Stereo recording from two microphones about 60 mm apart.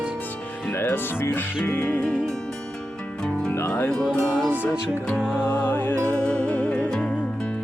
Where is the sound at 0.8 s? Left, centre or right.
Left.